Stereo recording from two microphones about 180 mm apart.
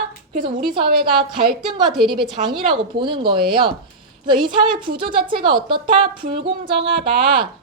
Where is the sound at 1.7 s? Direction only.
25° right (ahead or behind).